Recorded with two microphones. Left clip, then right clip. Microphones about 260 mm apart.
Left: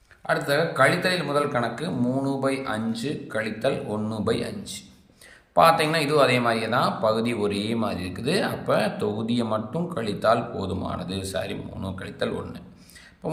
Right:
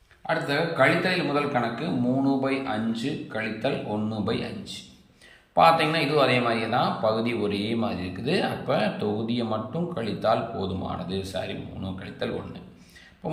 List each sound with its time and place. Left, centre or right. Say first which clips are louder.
0.3 s speech: left 2 dB; centre
13.2 s beatboxing: left 2 dB; centre